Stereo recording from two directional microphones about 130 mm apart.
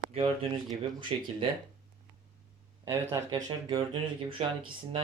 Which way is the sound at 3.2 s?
30° right (ahead or behind).